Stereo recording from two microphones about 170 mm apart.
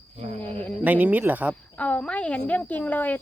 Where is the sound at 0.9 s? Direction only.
10° right (ahead or behind).